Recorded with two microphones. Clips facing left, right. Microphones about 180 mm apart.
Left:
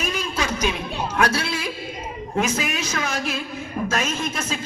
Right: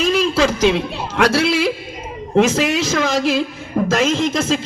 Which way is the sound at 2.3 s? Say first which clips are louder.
Right 9 dB; 90° right.